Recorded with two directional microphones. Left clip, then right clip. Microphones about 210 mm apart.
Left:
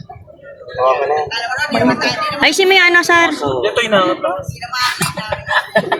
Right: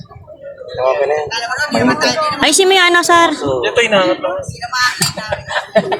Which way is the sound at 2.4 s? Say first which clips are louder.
Left 1 dB; 15° right (ahead or behind).